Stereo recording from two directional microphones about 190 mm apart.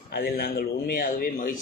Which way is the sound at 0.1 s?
55° left (ahead or behind).